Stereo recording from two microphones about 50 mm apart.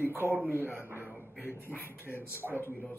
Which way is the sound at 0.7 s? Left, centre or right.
Right.